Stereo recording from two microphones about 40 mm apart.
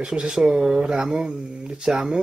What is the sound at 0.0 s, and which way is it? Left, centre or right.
Speech, right.